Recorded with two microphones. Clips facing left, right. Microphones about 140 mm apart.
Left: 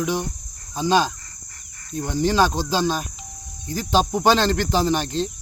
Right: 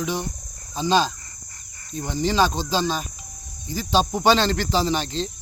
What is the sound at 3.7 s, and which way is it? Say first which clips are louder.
Cricket: left 1 dB; centre (ahead or behind).